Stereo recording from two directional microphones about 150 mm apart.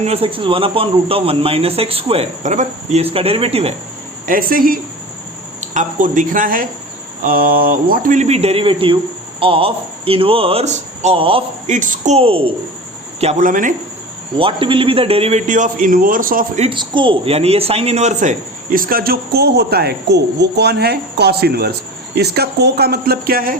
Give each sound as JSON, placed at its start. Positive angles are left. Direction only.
{"t": 0.0, "sound": "speech", "side_deg": -40}
{"t": 2.4, "sound": "speech", "side_deg": -55}
{"t": 4.3, "sound": "speech", "side_deg": -70}
{"t": 5.5, "sound": "speech", "side_deg": -55}
{"t": 11.6, "sound": "a man's voice", "side_deg": -55}
{"t": 13.4, "sound": "speech", "side_deg": -60}
{"t": 14.3, "sound": "a man's voice", "side_deg": -35}
{"t": 16.6, "sound": "a man's voice", "side_deg": -35}